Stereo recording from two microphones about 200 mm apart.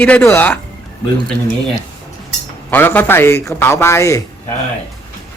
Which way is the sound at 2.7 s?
10° left (ahead or behind).